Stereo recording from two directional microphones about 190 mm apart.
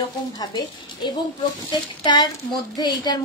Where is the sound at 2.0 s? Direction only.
25° left (ahead or behind).